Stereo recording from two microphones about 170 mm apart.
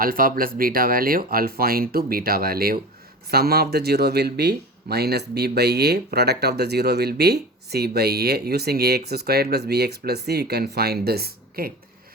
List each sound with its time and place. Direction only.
0.0 s speech: 60° right (ahead or behind)